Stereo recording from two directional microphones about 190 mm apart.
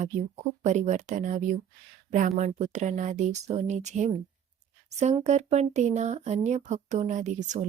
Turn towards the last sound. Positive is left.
turn(degrees=-40)  # may be behind; listen again after turning